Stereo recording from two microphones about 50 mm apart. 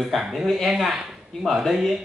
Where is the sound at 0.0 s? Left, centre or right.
Centre.